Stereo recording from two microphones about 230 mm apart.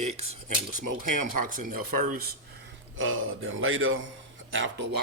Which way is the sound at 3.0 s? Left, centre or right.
Right.